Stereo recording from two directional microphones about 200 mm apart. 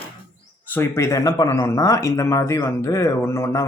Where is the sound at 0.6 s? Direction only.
10° left (ahead or behind).